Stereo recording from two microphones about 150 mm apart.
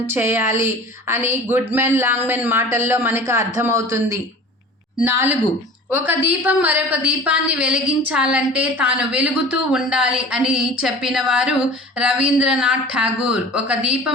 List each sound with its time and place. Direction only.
0.1 s a woman's voice: 15° right (ahead or behind)